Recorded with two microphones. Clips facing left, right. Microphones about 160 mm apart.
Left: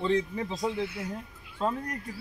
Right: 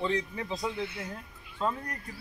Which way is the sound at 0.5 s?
10° left (ahead or behind).